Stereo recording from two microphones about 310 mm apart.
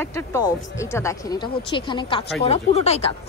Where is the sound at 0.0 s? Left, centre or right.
Centre.